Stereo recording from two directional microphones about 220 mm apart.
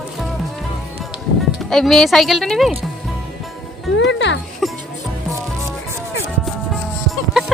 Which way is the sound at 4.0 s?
55° left (ahead or behind).